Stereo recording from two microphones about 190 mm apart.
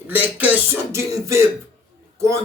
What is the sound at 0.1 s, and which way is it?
Throat clearing, 10° right (ahead or behind).